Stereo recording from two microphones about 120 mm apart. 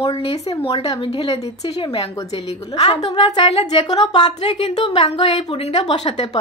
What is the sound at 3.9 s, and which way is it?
Speech, 40° left (ahead or behind).